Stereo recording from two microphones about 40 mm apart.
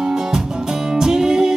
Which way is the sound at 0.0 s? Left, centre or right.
Centre.